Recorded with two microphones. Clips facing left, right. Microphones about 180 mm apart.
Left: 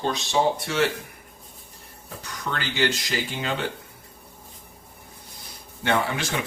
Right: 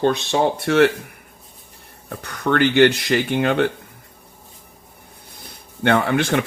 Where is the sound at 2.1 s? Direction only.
60° right (ahead or behind).